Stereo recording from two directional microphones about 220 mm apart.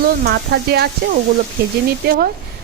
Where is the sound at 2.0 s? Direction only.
40° right (ahead or behind).